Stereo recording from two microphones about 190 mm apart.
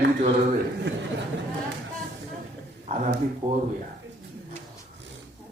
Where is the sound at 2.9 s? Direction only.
35° right (ahead or behind).